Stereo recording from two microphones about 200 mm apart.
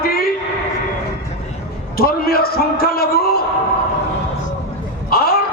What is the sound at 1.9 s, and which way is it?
A man's voice, 50° left (ahead or behind).